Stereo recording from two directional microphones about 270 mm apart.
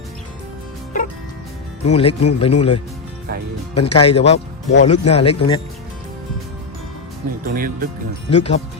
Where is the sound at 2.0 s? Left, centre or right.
Left.